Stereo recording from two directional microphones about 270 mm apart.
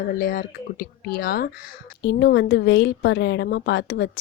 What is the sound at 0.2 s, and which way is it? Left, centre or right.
A woman's voice, left.